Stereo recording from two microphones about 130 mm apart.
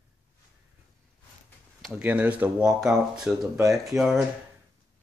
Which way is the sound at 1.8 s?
Centre (ahead or behind).